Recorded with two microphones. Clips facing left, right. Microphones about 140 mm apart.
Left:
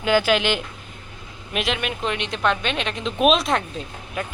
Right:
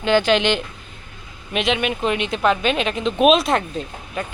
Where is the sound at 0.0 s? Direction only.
10° left (ahead or behind).